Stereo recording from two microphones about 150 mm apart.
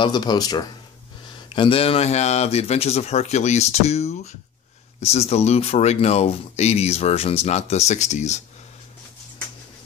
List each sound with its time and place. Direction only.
0.0 s speech: 30° left (ahead or behind); by 8.4 s 50° left (ahead or behind)